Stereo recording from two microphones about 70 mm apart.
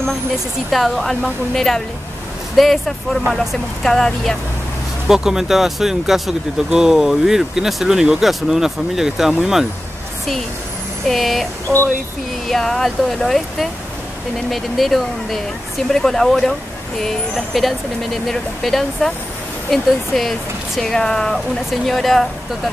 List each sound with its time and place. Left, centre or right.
0.7 s speech: centre
5.0 s speech: centre
11.1 s speech: centre
11.6 s speech: left
12.4 s speech: centre
17.6 s speech: centre